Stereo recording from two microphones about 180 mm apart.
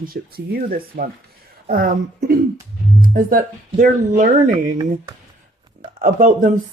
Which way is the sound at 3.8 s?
45° right (ahead or behind).